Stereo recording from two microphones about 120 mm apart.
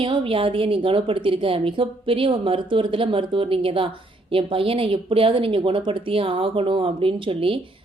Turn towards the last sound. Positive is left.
turn(degrees=-50)  # may be behind; listen again after turning